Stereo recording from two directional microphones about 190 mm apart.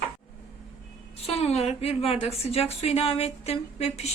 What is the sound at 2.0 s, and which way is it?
Speech, 30° left (ahead or behind).